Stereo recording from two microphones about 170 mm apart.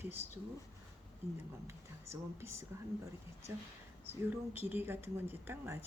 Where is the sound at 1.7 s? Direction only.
15° right (ahead or behind).